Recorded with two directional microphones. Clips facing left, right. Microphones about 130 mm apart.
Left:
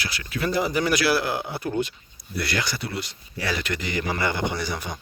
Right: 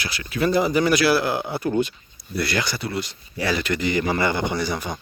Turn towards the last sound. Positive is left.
turn(degrees=-35)  # may be behind; listen again after turning